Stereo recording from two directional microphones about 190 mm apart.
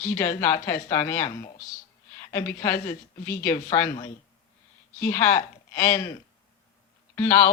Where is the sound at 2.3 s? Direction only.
15° left (ahead or behind).